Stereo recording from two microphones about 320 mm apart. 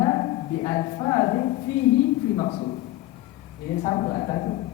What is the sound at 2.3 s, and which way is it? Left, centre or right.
Speech, centre.